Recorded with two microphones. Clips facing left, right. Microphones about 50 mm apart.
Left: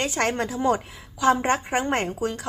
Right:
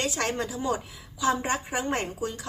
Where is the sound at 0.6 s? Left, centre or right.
Left.